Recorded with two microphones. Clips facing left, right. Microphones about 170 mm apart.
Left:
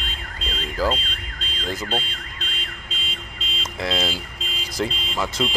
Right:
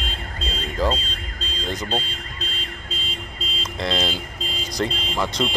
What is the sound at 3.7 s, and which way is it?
Speech, 5° left (ahead or behind).